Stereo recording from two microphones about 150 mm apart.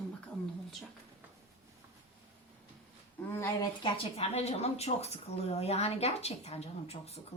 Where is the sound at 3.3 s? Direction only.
20° left (ahead or behind).